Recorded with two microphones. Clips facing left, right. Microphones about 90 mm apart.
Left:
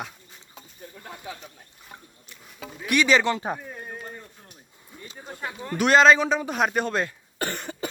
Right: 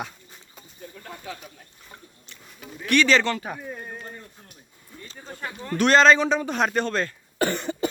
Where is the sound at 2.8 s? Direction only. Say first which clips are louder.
Right 1 dB; 10° left (ahead or behind).